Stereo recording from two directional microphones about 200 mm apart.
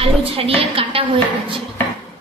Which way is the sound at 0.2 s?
30° right (ahead or behind).